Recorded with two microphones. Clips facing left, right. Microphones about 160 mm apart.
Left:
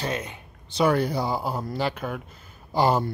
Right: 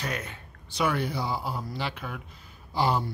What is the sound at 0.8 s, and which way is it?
Speech, 40° left (ahead or behind).